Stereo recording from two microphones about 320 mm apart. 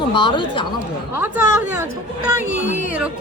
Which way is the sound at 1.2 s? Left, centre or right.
Centre.